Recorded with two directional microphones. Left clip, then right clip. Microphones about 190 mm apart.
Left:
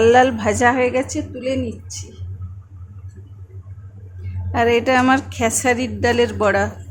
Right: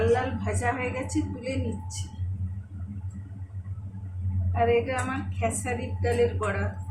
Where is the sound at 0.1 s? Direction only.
55° left (ahead or behind).